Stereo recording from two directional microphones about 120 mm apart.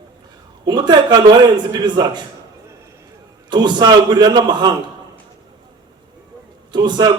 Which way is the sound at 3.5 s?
40° right (ahead or behind).